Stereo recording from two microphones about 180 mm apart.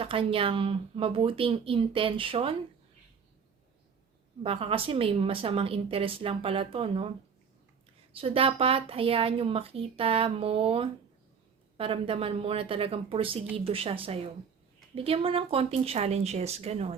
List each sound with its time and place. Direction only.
0.0 s speech: 30° right (ahead or behind)
4.4 s a woman's voice: 30° right (ahead or behind)
8.1 s a woman's voice: 30° right (ahead or behind)